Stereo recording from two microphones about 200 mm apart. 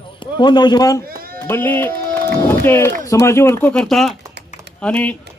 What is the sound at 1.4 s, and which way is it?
Speech, 10° left (ahead or behind).